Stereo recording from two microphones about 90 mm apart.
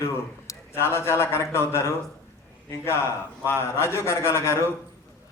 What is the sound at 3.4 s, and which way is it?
A man's voice, 30° left (ahead or behind).